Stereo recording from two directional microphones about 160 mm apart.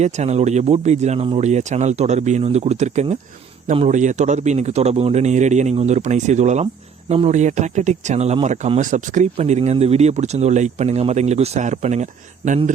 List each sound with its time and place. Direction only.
0.0 s speech: 45° right (ahead or behind)